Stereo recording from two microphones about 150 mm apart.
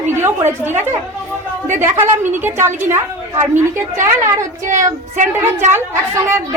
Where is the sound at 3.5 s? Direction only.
55° right (ahead or behind).